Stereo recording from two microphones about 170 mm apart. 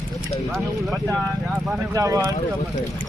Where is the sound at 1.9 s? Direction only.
20° right (ahead or behind).